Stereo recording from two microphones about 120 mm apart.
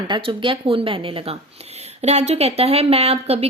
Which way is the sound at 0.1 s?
45° right (ahead or behind).